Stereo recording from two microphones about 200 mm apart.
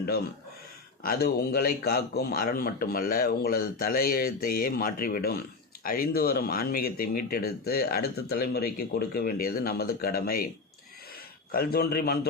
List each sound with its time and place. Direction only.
1.0 s a man's voice: 50° left (ahead or behind)
11.5 s a man's voice: 50° left (ahead or behind)